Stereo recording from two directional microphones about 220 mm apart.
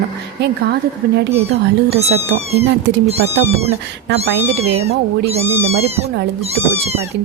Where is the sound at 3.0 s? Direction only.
30° right (ahead or behind).